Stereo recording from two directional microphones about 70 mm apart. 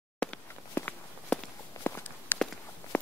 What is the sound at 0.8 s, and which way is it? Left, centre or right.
Walk, left.